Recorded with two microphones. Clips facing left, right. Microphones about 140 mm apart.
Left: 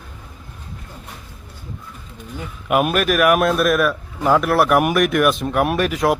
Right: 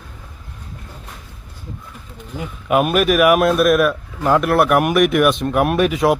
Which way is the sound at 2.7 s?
Centre (ahead or behind).